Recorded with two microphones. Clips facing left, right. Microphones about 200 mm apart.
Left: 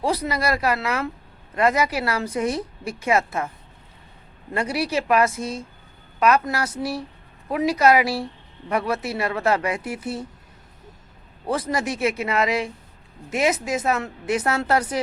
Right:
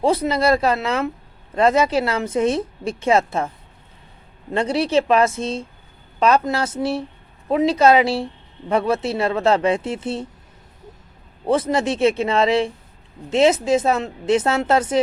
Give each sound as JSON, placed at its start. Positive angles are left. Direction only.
{"t": 0.0, "sound": "speech", "side_deg": -25}
{"t": 4.5, "sound": "speech", "side_deg": -25}
{"t": 11.4, "sound": "speech", "side_deg": -25}